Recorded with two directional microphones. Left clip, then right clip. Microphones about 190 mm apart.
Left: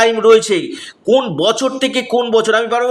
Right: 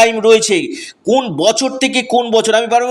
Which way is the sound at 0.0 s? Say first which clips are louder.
Even; 20° right (ahead or behind).